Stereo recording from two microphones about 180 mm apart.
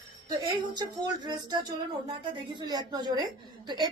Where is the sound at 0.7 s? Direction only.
25° right (ahead or behind).